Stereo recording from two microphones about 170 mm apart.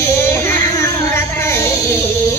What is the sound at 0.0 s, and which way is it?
Child singing, 15° left (ahead or behind).